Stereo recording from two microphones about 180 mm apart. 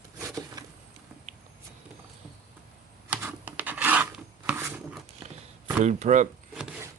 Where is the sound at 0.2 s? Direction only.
20° right (ahead or behind).